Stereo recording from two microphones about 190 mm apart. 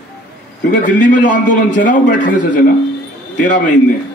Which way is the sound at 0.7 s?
45° left (ahead or behind).